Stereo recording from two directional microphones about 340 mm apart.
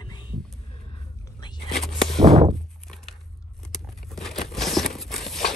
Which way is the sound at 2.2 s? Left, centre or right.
Centre.